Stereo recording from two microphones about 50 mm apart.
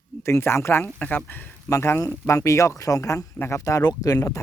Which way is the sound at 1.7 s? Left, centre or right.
Left.